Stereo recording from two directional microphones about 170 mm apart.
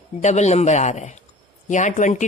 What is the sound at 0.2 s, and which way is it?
A woman's voice, 40° left (ahead or behind).